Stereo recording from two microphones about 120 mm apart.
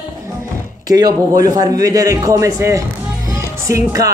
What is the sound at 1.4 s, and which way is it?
Speech, 30° right (ahead or behind).